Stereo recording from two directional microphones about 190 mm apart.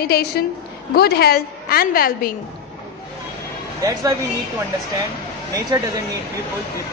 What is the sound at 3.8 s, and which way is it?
Speech, 20° right (ahead or behind).